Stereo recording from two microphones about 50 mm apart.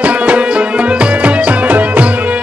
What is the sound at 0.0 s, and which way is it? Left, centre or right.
Music, right.